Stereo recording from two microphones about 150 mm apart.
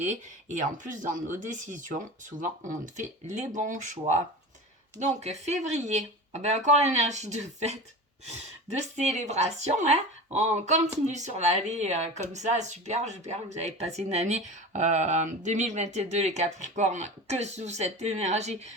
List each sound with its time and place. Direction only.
0.0 s speech: 50° right (ahead or behind)